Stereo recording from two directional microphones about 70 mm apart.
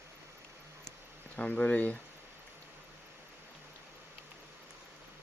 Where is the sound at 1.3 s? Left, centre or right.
Centre.